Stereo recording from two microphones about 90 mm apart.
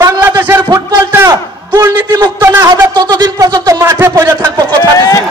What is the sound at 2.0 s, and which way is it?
A man's voice, 50° right (ahead or behind).